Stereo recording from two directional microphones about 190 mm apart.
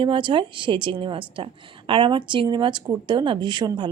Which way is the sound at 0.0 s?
25° right (ahead or behind).